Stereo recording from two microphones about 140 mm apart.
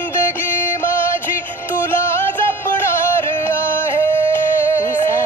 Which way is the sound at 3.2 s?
15° left (ahead or behind).